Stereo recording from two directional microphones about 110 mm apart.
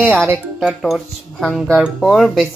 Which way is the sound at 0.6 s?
Centre (ahead or behind).